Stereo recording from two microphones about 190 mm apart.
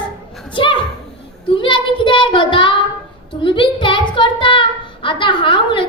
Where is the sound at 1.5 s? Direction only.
25° left (ahead or behind).